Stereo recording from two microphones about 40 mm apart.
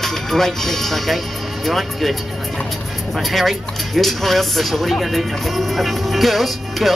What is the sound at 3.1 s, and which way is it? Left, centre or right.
Speech, centre.